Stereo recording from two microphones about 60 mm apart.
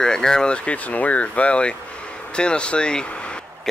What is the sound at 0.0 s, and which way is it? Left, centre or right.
Speech, centre.